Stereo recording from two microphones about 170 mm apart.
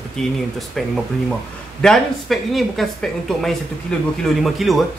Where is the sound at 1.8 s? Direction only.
Centre (ahead or behind).